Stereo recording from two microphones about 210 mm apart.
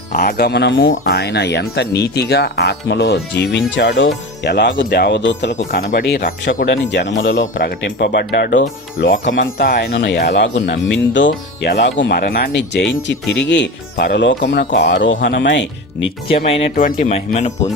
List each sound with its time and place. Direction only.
0.1 s speech: 45° left (ahead or behind); by 0.9 s 65° left (ahead or behind)
1.0 s speech: 50° left (ahead or behind)
5.5 s speech: 45° left (ahead or behind); by 7.4 s 65° left (ahead or behind)
7.4 s speech: 40° left (ahead or behind); by 11.3 s 60° left (ahead or behind)
11.3 s speech: 50° left (ahead or behind)
16.7 s speech: 40° left (ahead or behind)